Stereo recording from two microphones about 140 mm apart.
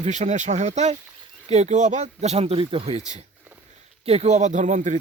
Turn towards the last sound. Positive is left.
turn(degrees=-60)  # may be behind; listen again after turning